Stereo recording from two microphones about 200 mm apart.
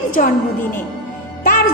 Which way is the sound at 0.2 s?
40° left (ahead or behind).